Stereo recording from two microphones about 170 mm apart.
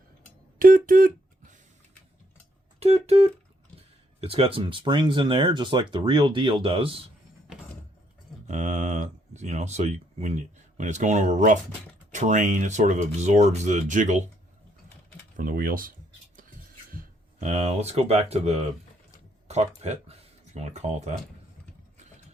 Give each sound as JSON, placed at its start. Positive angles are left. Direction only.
{"t": 0.6, "sound": "a sound", "side_deg": -55}
{"t": 2.8, "sound": "speech", "side_deg": -35}
{"t": 8.4, "sound": "speech", "side_deg": -45}
{"t": 15.4, "sound": "speech", "side_deg": -55}
{"t": 17.4, "sound": "speech", "side_deg": -40}